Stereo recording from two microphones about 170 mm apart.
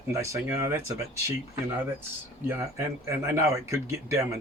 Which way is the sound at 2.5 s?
15° right (ahead or behind).